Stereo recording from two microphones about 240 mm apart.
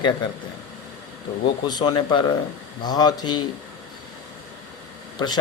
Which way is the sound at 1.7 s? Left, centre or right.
Centre.